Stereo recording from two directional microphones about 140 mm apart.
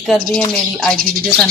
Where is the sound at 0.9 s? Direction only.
90° right.